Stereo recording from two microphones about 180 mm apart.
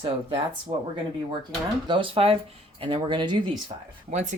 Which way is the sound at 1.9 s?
30° right (ahead or behind).